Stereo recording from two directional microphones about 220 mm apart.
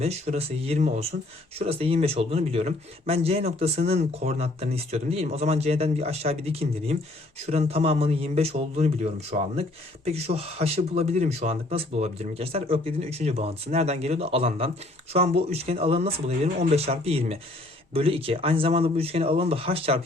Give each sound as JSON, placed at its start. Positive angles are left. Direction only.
{"t": 0.0, "sound": "a man's voice", "side_deg": -30}